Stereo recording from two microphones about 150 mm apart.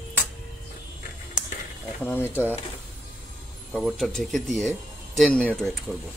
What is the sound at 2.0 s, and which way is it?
Speech, 15° left (ahead or behind).